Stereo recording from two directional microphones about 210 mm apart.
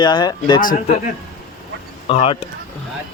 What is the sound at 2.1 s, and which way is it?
Speech, 25° left (ahead or behind).